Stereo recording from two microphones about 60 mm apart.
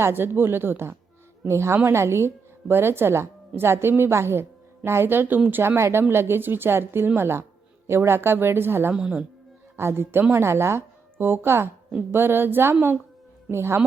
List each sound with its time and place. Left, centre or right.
0.0 s a woman's voice: right
8.9 s speech: centre
9.7 s a woman's voice: right